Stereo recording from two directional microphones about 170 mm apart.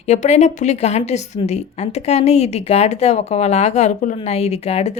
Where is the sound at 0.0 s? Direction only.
40° left (ahead or behind).